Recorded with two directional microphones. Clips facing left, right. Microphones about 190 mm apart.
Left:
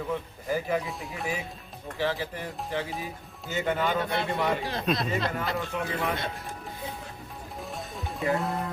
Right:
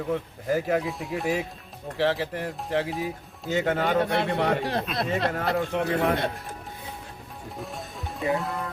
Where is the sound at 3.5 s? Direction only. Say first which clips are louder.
Right 4 dB; 75° right (ahead or behind).